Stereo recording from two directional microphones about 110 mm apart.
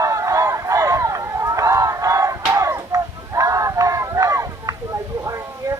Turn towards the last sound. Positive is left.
turn(degrees=-30)  # may be behind; listen again after turning